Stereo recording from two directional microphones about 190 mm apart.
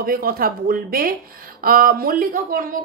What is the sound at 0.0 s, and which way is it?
A woman's voice, 50° right (ahead or behind).